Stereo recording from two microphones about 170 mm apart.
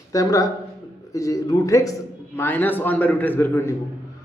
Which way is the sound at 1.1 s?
20° left (ahead or behind).